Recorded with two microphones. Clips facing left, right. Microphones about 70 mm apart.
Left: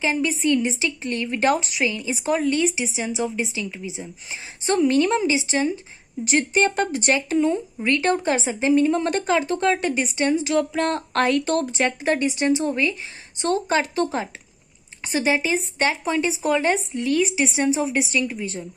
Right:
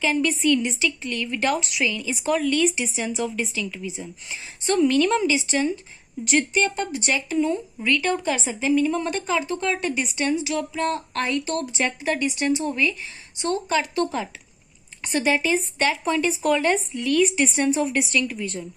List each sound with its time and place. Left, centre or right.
0.0 s a woman's voice: centre
6.7 s a woman's voice: left
9.8 s a woman's voice: left
15.0 s a woman's voice: centre
17.5 s a woman's voice: centre